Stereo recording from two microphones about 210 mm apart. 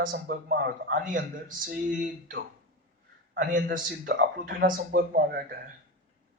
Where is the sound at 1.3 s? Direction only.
40° right (ahead or behind).